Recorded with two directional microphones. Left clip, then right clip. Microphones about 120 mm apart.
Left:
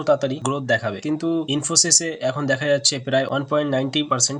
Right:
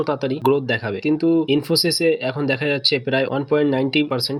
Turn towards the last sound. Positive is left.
turn(degrees=-25)  # may be behind; listen again after turning